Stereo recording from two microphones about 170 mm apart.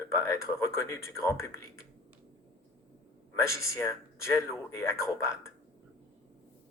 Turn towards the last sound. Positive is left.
turn(degrees=15)  # may be behind; listen again after turning